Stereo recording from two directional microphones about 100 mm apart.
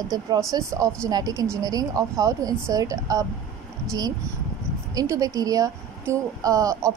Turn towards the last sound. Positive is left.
turn(degrees=-35)  # may be behind; listen again after turning